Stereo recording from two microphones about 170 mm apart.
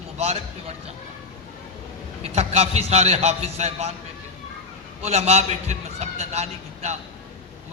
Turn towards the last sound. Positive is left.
turn(degrees=-40)  # may be behind; listen again after turning